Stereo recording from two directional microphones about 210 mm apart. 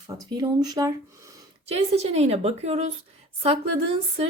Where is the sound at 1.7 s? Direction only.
30° right (ahead or behind).